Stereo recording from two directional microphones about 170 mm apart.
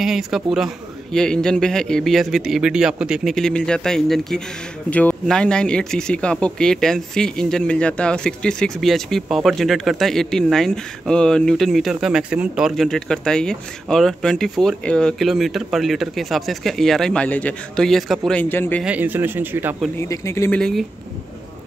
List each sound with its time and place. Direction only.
0.0 s speech: centre (ahead or behind)
18.9 s speech: 10° right (ahead or behind)
20.0 s speech: 15° left (ahead or behind)